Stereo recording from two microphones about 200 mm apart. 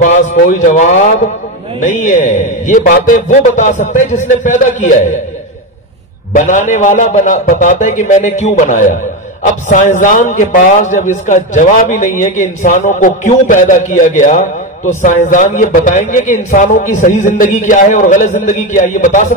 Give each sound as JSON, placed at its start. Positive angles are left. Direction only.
{"t": 0.0, "sound": "a man's voice", "side_deg": 40}
{"t": 6.3, "sound": "a man's voice", "side_deg": 40}